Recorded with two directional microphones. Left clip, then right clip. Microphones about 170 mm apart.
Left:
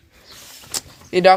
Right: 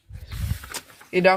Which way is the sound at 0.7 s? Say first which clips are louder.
Left 4 dB; 30° left (ahead or behind).